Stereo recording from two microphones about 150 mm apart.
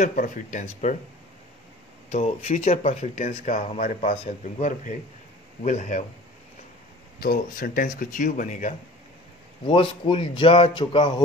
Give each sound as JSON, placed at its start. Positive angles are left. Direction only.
{"t": 0.0, "sound": "speech", "side_deg": 60}
{"t": 2.0, "sound": "speech", "side_deg": 50}
{"t": 7.2, "sound": "speech", "side_deg": 70}
{"t": 9.7, "sound": "a man's voice", "side_deg": 35}